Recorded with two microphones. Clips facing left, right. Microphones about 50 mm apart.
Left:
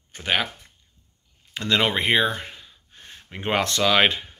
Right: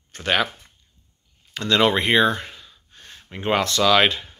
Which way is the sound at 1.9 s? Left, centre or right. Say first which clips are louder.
Right 3 dB; centre.